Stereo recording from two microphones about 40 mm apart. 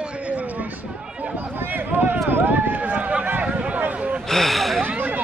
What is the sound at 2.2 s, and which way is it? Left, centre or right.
Run, right.